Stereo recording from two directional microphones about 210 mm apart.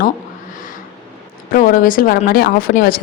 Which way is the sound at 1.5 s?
40° left (ahead or behind).